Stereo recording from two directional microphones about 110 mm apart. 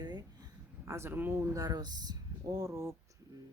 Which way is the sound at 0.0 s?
40° right (ahead or behind).